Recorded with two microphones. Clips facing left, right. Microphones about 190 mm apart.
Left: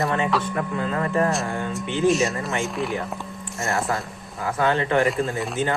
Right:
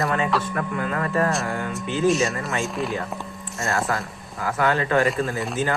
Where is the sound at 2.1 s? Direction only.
Centre (ahead or behind).